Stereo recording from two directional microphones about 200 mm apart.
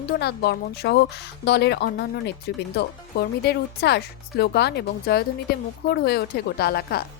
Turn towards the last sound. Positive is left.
turn(degrees=50)  # may be behind; listen again after turning